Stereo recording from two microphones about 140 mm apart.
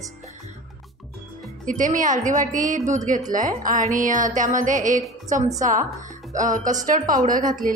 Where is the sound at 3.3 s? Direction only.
75° right (ahead or behind).